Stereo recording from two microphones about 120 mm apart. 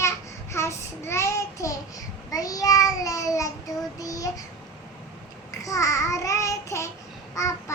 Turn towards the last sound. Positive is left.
turn(degrees=25)  # may be behind; listen again after turning